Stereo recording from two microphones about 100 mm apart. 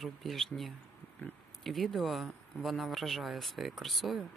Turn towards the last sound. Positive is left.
turn(degrees=0)  # may be behind; listen again after turning